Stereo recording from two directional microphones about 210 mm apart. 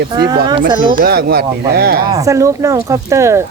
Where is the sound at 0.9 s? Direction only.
45° right (ahead or behind).